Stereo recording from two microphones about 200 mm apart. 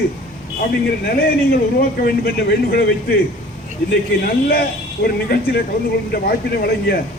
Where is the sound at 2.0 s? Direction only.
50° left (ahead or behind).